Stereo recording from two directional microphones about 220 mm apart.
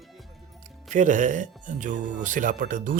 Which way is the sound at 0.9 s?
35° right (ahead or behind).